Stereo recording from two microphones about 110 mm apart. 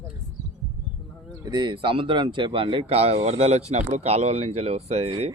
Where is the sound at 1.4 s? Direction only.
40° right (ahead or behind); by 5.3 s 70° right (ahead or behind).